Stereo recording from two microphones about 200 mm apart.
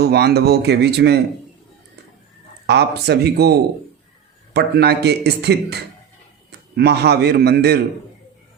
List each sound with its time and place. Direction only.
0.0 s speech: 55° right (ahead or behind)
2.6 s speech: 55° right (ahead or behind)